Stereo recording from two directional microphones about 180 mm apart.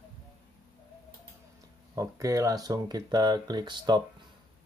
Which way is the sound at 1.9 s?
20° right (ahead or behind).